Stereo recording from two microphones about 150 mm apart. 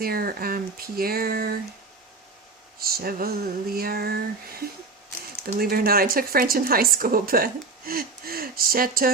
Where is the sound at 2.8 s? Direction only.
90° right.